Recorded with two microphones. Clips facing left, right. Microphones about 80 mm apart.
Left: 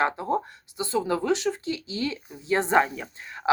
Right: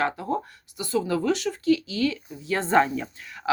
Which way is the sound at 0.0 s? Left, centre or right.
Left.